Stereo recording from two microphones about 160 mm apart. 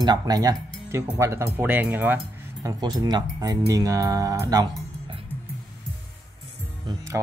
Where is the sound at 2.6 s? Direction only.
25° right (ahead or behind).